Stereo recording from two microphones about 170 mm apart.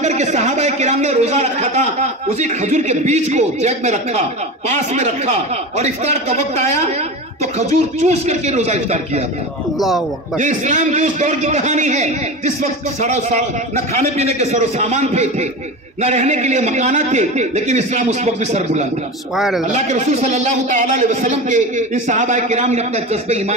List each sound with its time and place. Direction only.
0.0 s a man's voice: 45° right (ahead or behind)
9.8 s speech: centre (ahead or behind)
10.4 s a man's voice: 45° right (ahead or behind)
19.3 s speech: centre (ahead or behind)
19.7 s a man's voice: 45° right (ahead or behind)